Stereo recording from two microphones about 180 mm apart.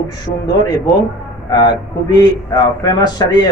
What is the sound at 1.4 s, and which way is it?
A man's voice, 25° left (ahead or behind).